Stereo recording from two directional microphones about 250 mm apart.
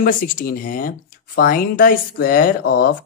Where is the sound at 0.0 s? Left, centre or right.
Left.